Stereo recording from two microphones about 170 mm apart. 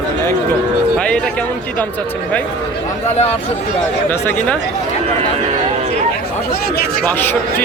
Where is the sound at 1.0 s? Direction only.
5° left (ahead or behind).